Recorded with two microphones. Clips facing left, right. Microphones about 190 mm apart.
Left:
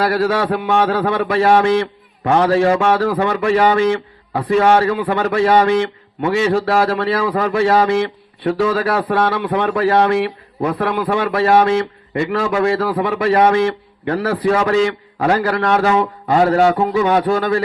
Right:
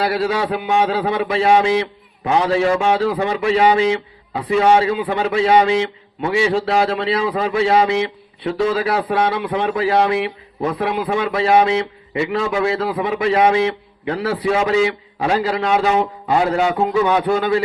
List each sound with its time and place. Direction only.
0.0 s a man's voice: 55° left (ahead or behind)